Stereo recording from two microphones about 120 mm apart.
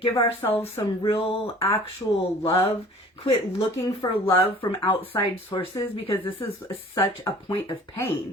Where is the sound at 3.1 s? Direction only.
50° left (ahead or behind).